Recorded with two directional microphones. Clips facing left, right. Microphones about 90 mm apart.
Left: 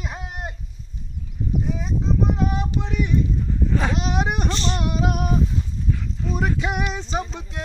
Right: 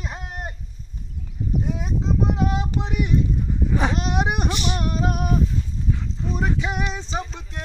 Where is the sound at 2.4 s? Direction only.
15° right (ahead or behind).